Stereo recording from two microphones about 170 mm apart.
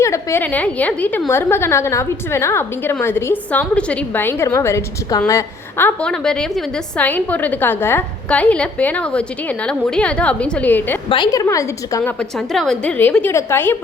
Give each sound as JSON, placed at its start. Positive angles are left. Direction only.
{"t": 0.0, "sound": "a woman's voice", "side_deg": 15}
{"t": 11.1, "sound": "a woman's voice", "side_deg": 25}
{"t": 12.5, "sound": "a woman's voice", "side_deg": 5}